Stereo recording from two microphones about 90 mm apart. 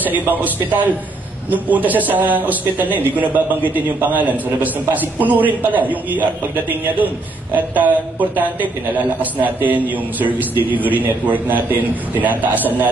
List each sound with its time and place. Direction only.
0.0 s a man's voice: 20° right (ahead or behind)